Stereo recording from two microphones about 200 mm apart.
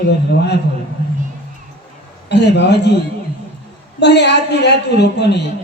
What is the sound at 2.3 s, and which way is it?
Speech, 60° left (ahead or behind).